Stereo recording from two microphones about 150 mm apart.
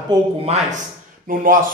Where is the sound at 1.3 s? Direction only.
65° right (ahead or behind).